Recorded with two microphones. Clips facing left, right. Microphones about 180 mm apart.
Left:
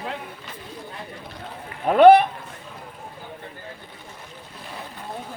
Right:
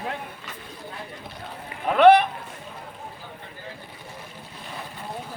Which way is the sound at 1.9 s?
40° left (ahead or behind).